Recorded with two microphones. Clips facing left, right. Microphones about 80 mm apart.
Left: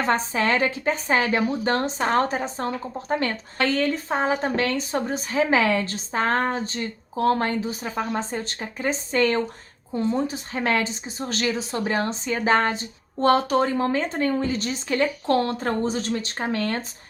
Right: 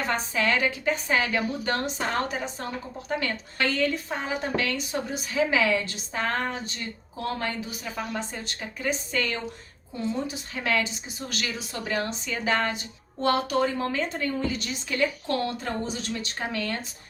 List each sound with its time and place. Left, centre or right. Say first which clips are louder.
0.0 s a woman's voice: left 4 dB; left